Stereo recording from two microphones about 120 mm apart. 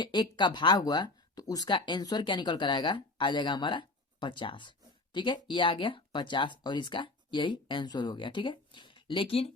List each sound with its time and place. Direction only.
0.0 s speech: 40° left (ahead or behind)